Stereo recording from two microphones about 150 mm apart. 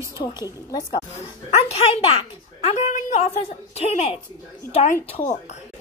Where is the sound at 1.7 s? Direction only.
40° left (ahead or behind).